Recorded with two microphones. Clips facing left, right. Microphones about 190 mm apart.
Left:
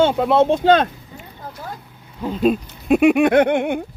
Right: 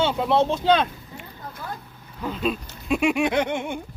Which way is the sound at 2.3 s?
45° left (ahead or behind).